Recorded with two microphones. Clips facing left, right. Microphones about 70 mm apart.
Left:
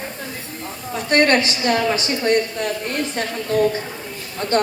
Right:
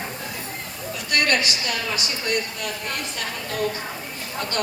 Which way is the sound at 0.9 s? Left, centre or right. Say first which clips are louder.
Left 7 dB; left.